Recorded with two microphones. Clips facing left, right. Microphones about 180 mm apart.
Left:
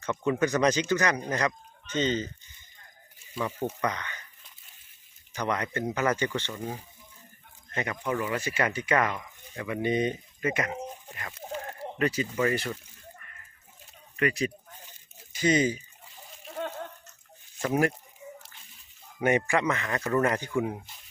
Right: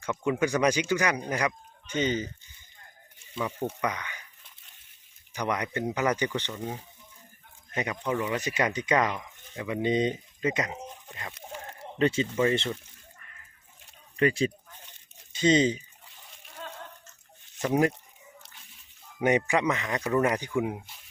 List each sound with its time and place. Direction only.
0.0 s speech: 10° right (ahead or behind)
3.4 s speech: 5° right (ahead or behind)
5.3 s speech: 15° right (ahead or behind)
6.5 s speech: 5° left (ahead or behind)
7.7 s speech: 15° right (ahead or behind)
14.2 s speech: 30° right (ahead or behind)
19.2 s speech: 15° right (ahead or behind)